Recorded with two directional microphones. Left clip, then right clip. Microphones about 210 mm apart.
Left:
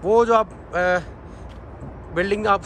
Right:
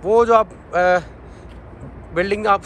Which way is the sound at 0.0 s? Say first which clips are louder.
Right 3 dB; 10° left (ahead or behind).